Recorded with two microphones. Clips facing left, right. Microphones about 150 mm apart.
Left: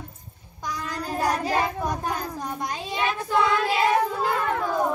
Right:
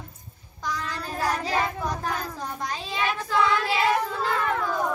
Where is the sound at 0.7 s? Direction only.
15° left (ahead or behind).